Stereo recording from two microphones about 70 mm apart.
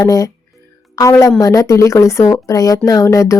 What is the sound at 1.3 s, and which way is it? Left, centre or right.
Speech, left.